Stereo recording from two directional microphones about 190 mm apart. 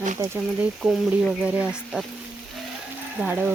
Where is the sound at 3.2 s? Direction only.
10° right (ahead or behind).